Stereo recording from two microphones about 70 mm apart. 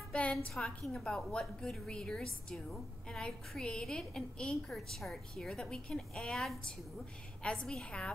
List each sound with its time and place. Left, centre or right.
0.1 s a woman's voice: centre